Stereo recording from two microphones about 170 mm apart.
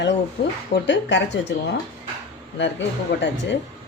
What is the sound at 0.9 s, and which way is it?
Speech, 90° left.